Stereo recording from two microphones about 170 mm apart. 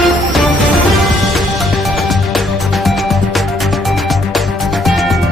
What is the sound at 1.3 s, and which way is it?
Music, centre (ahead or behind).